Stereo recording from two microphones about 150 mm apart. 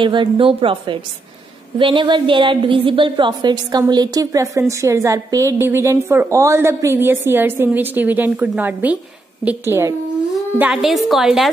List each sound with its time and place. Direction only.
0.0 s a woman's voice: 35° right (ahead or behind); by 9.9 s 15° right (ahead or behind)
10.6 s a woman's voice: 5° right (ahead or behind)